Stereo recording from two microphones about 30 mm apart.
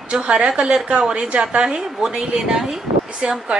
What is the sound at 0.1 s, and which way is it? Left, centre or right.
A woman's voice, right.